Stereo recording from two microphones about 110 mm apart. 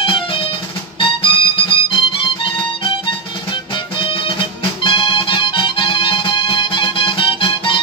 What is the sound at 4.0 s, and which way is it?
Music, 50° left (ahead or behind).